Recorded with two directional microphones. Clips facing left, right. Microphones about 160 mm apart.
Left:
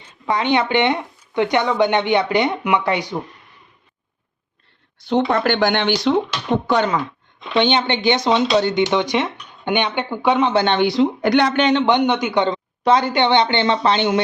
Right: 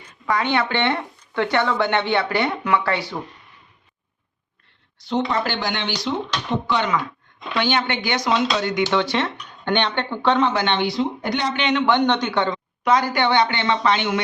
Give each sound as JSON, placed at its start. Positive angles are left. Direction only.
{"t": 0.0, "sound": "speech", "side_deg": 20}
{"t": 4.9, "sound": "speech", "side_deg": 55}
{"t": 6.7, "sound": "speech", "side_deg": 40}
{"t": 7.5, "sound": "speech", "side_deg": 25}
{"t": 8.8, "sound": "speech", "side_deg": 15}
{"t": 10.5, "sound": "speech", "side_deg": 30}
{"t": 10.8, "sound": "speech", "side_deg": 75}
{"t": 11.5, "sound": "speech", "side_deg": 40}
{"t": 11.8, "sound": "speech", "side_deg": 15}
{"t": 12.5, "sound": "speech", "side_deg": 25}